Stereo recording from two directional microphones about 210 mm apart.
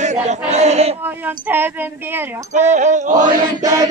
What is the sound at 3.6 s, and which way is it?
Speech, 15° right (ahead or behind).